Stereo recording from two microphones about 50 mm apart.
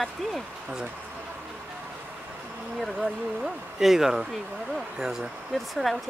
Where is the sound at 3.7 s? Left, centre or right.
Centre.